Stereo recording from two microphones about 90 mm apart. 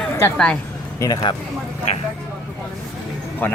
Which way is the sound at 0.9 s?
40° left (ahead or behind).